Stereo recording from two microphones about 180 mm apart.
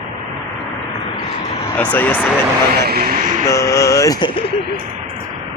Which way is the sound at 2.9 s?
55° right (ahead or behind).